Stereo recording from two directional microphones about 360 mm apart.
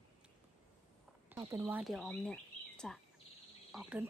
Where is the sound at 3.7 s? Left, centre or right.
Centre.